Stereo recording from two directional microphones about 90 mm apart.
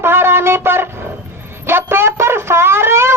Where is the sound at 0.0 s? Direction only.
25° right (ahead or behind).